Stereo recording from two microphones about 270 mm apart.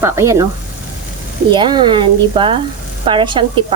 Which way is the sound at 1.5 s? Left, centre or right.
Centre.